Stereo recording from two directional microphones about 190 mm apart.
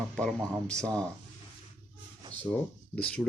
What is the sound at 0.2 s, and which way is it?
Speech, 5° left (ahead or behind).